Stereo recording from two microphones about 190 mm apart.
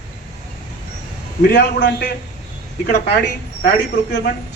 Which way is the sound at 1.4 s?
65° left (ahead or behind).